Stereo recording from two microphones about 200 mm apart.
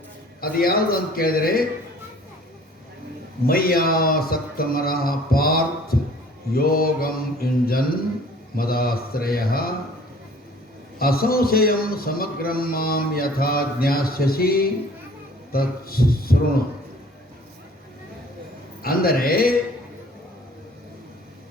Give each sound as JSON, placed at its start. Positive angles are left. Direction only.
{"t": 0.4, "sound": "a man's voice", "side_deg": 45}
{"t": 3.4, "sound": "a man's voice", "side_deg": 50}
{"t": 11.0, "sound": "a man's voice", "side_deg": 50}
{"t": 18.8, "sound": "a man's voice", "side_deg": 45}